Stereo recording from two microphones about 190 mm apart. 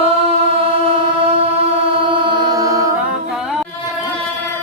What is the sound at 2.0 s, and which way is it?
Mantra, 25° right (ahead or behind).